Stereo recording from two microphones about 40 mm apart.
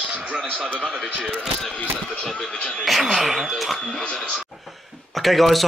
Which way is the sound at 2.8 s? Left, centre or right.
Centre.